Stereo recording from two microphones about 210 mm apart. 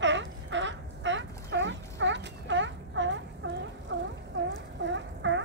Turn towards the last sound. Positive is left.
turn(degrees=-60)  # may be behind; listen again after turning